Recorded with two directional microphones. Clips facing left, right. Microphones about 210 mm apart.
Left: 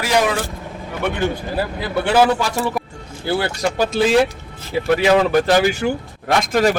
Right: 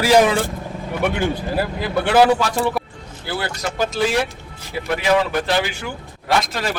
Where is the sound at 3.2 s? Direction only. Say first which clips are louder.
Left 6 dB; 30° left (ahead or behind).